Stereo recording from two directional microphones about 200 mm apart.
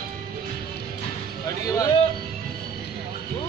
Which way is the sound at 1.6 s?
15° left (ahead or behind).